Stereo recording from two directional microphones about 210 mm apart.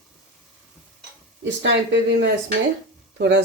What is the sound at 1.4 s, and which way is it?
Speech, 60° right (ahead or behind).